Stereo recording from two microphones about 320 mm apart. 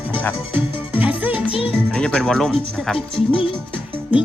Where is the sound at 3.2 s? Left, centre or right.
Centre.